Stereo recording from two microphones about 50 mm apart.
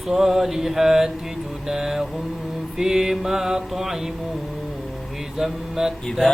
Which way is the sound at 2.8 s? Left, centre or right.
Centre.